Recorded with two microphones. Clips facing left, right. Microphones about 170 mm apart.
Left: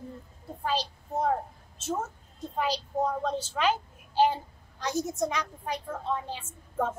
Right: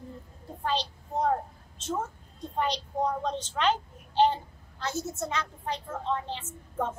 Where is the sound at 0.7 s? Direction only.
5° left (ahead or behind).